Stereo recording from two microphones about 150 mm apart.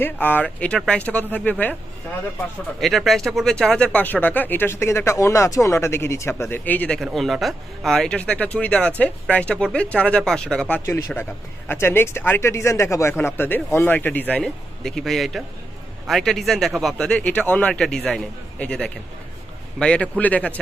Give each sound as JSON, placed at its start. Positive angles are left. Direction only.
{"t": 0.0, "sound": "speech", "side_deg": 10}
{"t": 2.8, "sound": "speech", "side_deg": 0}
{"t": 10.8, "sound": "a man's voice", "side_deg": 20}